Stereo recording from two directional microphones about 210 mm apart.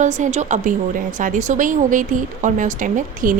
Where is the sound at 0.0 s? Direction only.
35° right (ahead or behind).